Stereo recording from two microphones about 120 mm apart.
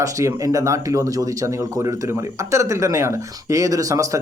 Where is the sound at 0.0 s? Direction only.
25° right (ahead or behind).